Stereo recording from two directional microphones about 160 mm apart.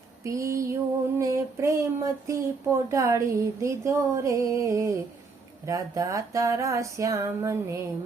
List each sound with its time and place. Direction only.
0.3 s speech: 20° right (ahead or behind)